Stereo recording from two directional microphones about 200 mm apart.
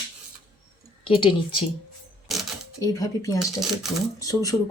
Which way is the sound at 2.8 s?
15° left (ahead or behind).